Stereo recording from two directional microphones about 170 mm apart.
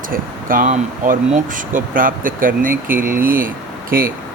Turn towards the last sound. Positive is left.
turn(degrees=-55)  # may be behind; listen again after turning